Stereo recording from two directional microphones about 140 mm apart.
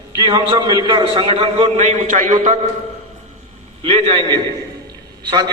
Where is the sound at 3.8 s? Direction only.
40° right (ahead or behind).